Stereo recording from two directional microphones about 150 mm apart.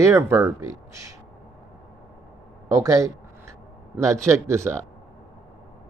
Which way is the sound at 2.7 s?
20° right (ahead or behind).